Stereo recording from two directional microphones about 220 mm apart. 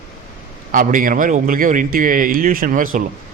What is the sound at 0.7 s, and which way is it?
A man's voice, 40° right (ahead or behind).